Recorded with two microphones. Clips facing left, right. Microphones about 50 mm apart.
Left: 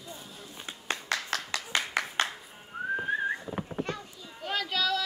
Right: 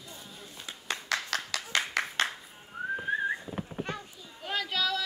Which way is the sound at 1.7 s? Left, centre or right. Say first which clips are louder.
Even; left.